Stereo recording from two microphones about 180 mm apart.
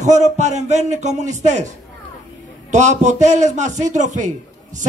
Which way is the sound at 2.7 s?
40° right (ahead or behind).